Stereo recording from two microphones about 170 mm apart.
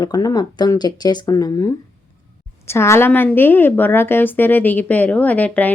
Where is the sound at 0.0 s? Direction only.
20° left (ahead or behind).